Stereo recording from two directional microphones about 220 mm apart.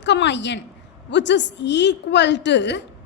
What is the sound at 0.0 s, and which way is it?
A woman's voice, 55° left (ahead or behind).